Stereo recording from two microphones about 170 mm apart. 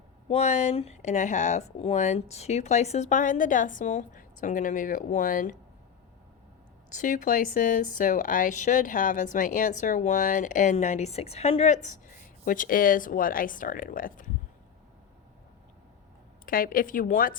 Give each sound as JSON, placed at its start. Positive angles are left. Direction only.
{"t": 0.3, "sound": "speech", "side_deg": 40}
{"t": 6.9, "sound": "speech", "side_deg": 50}
{"t": 16.5, "sound": "a woman's voice", "side_deg": 55}